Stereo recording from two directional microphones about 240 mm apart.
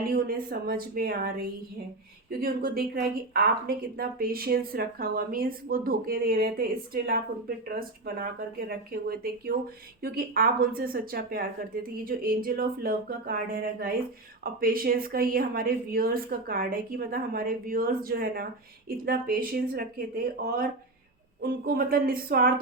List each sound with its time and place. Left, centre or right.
0.1 s a woman's voice: right
21.4 s a woman's voice: right